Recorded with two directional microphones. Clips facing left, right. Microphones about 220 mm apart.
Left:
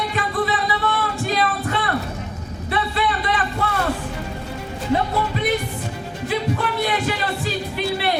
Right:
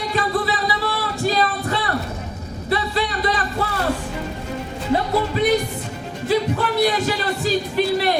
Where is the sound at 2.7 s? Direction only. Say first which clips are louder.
Right 1 dB; 35° right (ahead or behind).